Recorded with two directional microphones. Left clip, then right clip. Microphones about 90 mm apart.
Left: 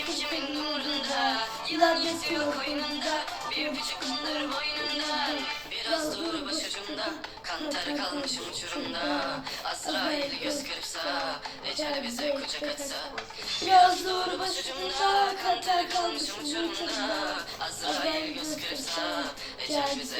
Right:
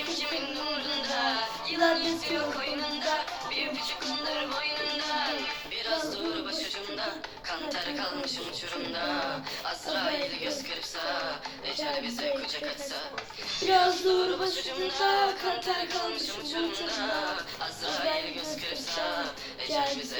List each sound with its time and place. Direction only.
0.1 s music: 25° right (ahead or behind)
7.7 s music: 25° right (ahead or behind)